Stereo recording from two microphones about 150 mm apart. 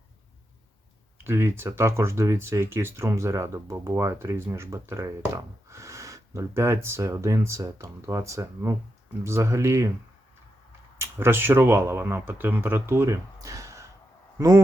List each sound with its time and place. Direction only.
1.2 s speech: 15° right (ahead or behind)
10.9 s speech: 15° right (ahead or behind)